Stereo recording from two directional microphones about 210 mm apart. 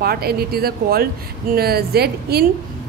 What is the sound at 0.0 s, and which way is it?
A woman's voice, 45° right (ahead or behind).